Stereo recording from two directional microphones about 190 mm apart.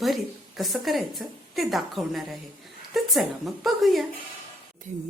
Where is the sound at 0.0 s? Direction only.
Centre (ahead or behind).